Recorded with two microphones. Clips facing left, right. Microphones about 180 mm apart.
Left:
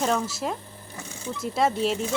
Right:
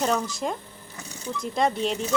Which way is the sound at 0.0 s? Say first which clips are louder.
Even; centre (ahead or behind).